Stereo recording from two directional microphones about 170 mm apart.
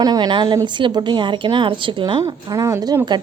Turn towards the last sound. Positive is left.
turn(degrees=-20)  # may be behind; listen again after turning